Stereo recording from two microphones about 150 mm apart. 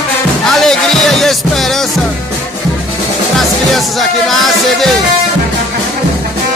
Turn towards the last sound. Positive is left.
turn(degrees=0)  # may be behind; listen again after turning